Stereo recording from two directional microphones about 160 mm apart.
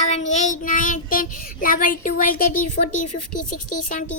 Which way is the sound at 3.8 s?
50° left (ahead or behind).